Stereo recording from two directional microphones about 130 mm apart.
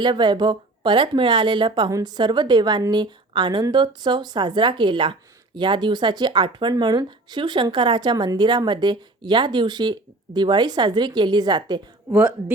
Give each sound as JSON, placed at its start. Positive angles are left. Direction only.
{"t": 0.0, "sound": "speech", "side_deg": -35}
{"t": 12.1, "sound": "speech", "side_deg": -15}